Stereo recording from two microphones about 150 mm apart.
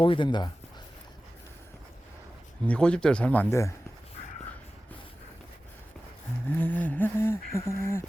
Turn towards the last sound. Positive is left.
turn(degrees=15)  # may be behind; listen again after turning